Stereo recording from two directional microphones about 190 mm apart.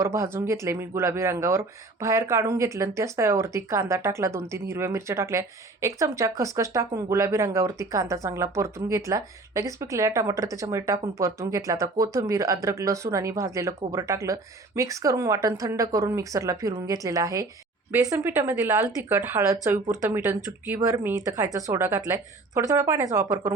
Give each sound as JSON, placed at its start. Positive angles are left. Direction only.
{"t": 0.0, "sound": "speech", "side_deg": -15}